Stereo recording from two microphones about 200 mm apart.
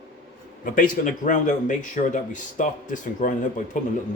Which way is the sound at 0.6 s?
40° left (ahead or behind).